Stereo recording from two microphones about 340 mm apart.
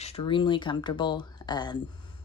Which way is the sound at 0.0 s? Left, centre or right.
Centre.